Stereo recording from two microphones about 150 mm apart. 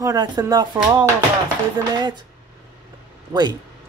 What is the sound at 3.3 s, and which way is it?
Speech, 25° right (ahead or behind).